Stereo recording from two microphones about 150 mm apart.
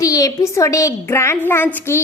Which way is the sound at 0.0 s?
20° left (ahead or behind).